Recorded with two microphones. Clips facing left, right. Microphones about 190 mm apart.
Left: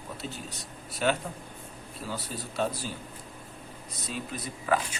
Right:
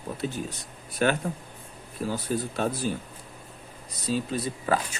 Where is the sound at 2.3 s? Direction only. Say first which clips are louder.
Right 10 dB; 60° right (ahead or behind).